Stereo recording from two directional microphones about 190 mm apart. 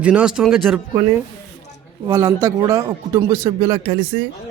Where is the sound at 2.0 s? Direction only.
15° right (ahead or behind).